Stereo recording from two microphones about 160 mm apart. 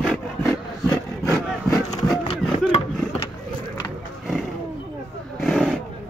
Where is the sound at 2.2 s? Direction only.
35° left (ahead or behind).